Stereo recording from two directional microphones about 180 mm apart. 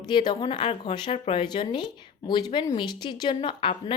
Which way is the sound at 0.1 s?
25° left (ahead or behind).